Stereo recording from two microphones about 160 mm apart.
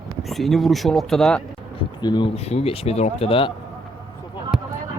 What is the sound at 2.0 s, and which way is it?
Speech, 25° left (ahead or behind).